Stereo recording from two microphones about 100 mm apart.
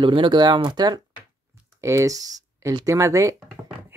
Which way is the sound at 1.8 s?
30° right (ahead or behind).